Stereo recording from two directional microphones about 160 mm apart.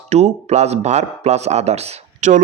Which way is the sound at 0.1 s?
45° right (ahead or behind).